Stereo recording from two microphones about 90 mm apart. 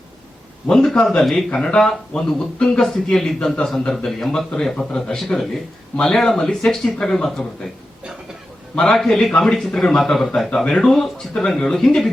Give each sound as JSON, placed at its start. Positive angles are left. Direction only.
{"t": 0.7, "sound": "speech", "side_deg": 10}
{"t": 8.7, "sound": "speech", "side_deg": 10}